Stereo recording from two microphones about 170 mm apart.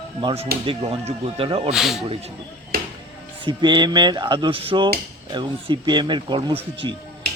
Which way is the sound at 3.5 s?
25° right (ahead or behind).